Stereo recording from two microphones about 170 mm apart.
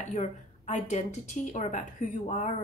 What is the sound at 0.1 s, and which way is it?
A woman's voice, 45° left (ahead or behind).